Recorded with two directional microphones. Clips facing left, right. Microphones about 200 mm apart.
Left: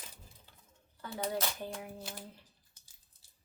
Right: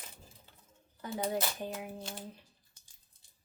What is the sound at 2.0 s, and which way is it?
Speech, 5° left (ahead or behind).